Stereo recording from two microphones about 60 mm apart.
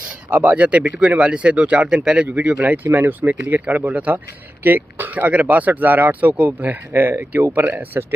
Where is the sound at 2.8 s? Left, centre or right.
Right.